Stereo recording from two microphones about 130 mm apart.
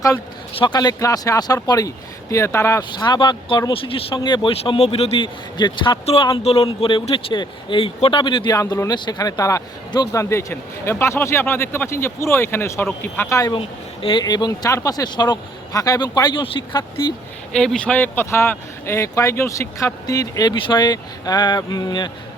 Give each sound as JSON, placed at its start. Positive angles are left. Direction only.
{"t": 0.5, "sound": "speech", "side_deg": 35}
{"t": 3.0, "sound": "speech", "side_deg": 35}
{"t": 4.5, "sound": "speech", "side_deg": 50}
{"t": 5.2, "sound": "speech", "side_deg": 35}
{"t": 6.4, "sound": "speech", "side_deg": 50}
{"t": 8.5, "sound": "speech", "side_deg": 25}
{"t": 13.4, "sound": "speech", "side_deg": 40}
{"t": 17.5, "sound": "speech", "side_deg": 5}